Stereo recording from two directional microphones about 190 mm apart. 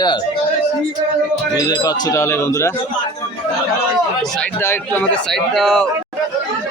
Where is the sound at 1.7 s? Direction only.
20° left (ahead or behind).